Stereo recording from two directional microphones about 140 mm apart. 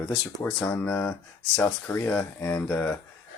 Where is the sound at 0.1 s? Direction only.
5° left (ahead or behind).